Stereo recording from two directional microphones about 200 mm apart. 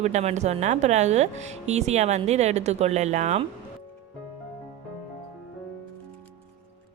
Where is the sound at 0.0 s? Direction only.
35° right (ahead or behind).